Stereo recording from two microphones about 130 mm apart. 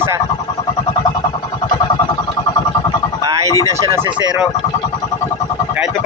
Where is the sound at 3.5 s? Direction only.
25° left (ahead or behind).